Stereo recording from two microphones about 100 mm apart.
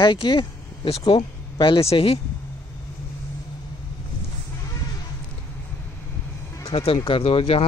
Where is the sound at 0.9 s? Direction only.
75° left (ahead or behind).